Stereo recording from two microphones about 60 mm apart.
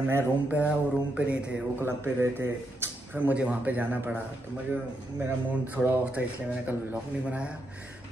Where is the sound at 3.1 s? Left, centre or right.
Right.